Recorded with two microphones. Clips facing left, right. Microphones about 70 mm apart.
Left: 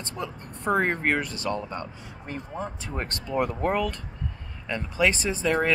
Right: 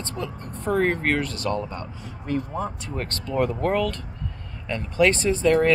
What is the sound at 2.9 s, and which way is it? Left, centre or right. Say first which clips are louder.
Speech: right 2 dB; left.